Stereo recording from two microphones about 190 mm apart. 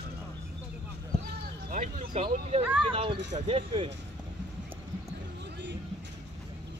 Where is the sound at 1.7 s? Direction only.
35° right (ahead or behind).